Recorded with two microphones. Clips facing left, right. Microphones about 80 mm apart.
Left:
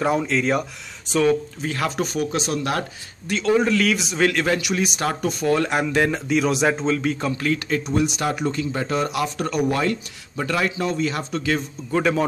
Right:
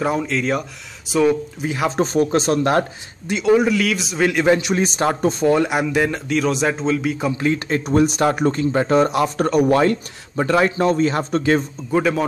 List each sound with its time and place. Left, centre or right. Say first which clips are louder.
0.0 s speech: even; centre
1.9 s speech: right 9 dB; right
3.3 s a man's voice: right 3 dB; centre
4.3 s a man's voice: right 5 dB; centre
4.6 s speech: right 4 dB; right
5.6 s speech: right 2 dB; centre
7.3 s speech: right 3 dB; right
7.8 s speech: right 6 dB; right
11.9 s speech: right 2 dB; centre